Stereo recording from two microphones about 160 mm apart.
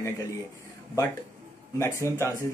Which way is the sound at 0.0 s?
20° left (ahead or behind).